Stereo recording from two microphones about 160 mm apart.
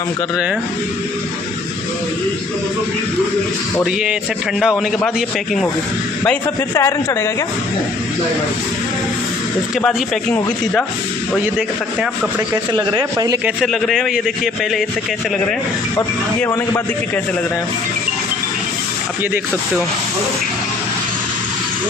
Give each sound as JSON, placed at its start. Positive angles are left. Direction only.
{"t": 4.6, "sound": "a man's voice", "side_deg": -5}
{"t": 6.7, "sound": "a man's voice", "side_deg": 15}
{"t": 9.8, "sound": "a man's voice", "side_deg": 5}
{"t": 12.7, "sound": "speech", "side_deg": -30}
{"t": 13.4, "sound": "a man's voice", "side_deg": 0}